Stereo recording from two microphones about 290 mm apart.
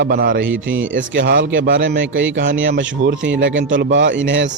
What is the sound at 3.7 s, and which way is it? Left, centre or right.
Speech, right.